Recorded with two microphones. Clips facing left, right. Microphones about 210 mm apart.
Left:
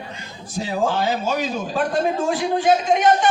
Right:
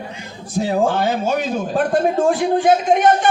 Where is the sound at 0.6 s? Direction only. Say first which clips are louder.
Right 4 dB; 55° right (ahead or behind).